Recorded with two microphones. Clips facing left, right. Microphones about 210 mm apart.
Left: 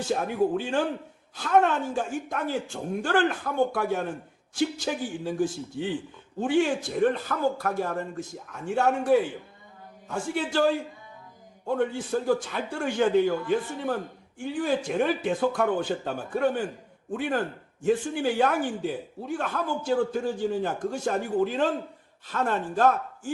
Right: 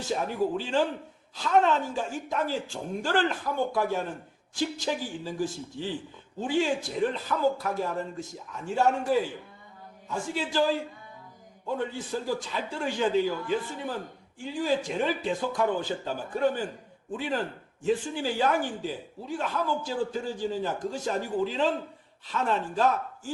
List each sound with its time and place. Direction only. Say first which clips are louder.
0.1 s a man's voice: left 2 dB; 55° left (ahead or behind)